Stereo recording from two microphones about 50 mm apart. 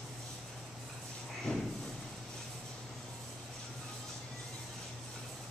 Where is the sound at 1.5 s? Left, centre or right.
Centre.